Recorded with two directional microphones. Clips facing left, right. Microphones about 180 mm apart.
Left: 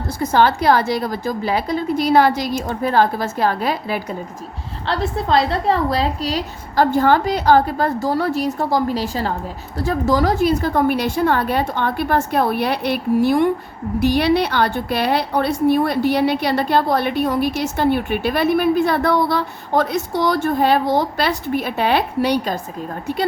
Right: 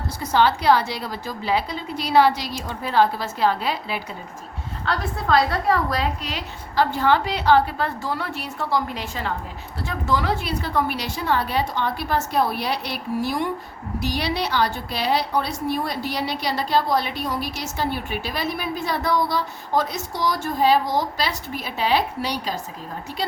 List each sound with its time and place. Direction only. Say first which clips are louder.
0.2 s a woman's voice: left 4 dB; 50° left (ahead or behind)
4.9 s a woman's voice: left 3 dB; 25° left (ahead or behind); by 22.6 s 55° left (ahead or behind)